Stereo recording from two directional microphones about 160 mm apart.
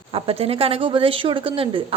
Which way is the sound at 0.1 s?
40° right (ahead or behind).